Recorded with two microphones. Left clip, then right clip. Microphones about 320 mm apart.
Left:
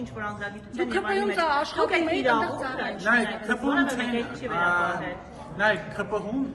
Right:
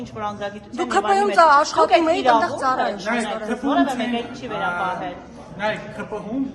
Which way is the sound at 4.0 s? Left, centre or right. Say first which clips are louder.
Right 3 dB; centre.